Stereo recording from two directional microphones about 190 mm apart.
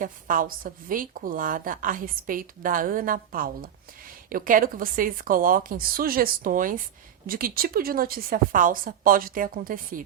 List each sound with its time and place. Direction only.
0.0 s a woman's voice: 45° right (ahead or behind)